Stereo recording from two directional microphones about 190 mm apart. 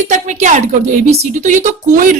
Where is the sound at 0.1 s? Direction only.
40° right (ahead or behind).